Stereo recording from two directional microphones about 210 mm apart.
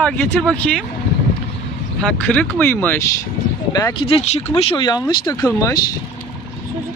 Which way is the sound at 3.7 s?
20° left (ahead or behind).